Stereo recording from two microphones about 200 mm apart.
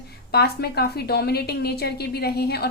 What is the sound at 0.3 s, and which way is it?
A woman's voice, 50° left (ahead or behind).